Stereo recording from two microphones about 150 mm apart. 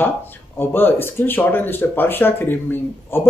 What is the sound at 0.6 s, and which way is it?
Speech, 15° left (ahead or behind).